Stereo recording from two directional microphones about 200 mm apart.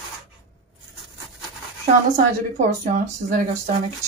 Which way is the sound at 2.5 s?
35° right (ahead or behind).